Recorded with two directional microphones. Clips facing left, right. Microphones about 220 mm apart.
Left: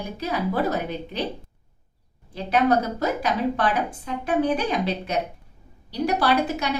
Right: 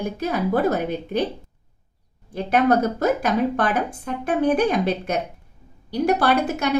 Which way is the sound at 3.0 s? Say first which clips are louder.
Right 4 dB; 50° right (ahead or behind).